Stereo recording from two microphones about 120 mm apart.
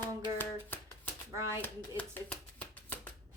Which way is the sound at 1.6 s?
15° left (ahead or behind).